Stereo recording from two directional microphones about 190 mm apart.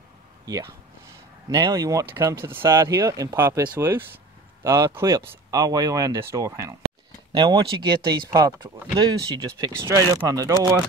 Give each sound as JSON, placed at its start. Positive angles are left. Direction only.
{"t": 1.5, "sound": "speech", "side_deg": -20}